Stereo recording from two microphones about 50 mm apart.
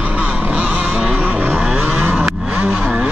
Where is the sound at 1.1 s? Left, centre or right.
Right.